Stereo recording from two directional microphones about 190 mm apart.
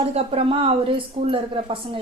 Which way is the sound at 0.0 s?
30° right (ahead or behind).